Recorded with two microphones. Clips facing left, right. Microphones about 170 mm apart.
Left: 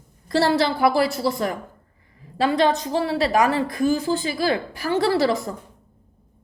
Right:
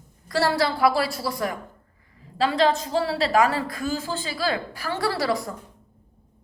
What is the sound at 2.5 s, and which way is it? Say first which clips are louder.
A woman's voice: left 1 dB; 20° left (ahead or behind).